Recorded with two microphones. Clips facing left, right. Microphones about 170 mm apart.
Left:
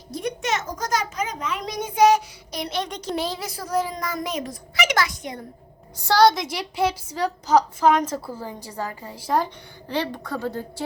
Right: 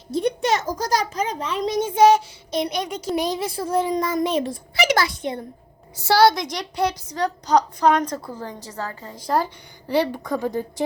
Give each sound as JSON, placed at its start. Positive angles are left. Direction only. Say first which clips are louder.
{"t": 0.1, "sound": "a child's voice", "louder": "right 5 dB", "side_deg": -30}
{"t": 6.0, "sound": "a woman's voice", "louder": "right 1 dB", "side_deg": -5}
{"t": 9.9, "sound": "a woman's voice", "louder": "right 5 dB", "side_deg": -10}